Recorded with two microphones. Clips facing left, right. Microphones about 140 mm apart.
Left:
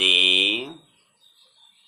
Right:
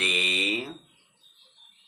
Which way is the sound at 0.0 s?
15° left (ahead or behind).